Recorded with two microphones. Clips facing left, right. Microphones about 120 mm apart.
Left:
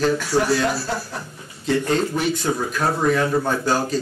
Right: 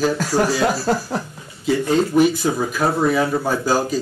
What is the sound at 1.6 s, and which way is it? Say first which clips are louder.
Speech: right 2 dB; 5° right (ahead or behind).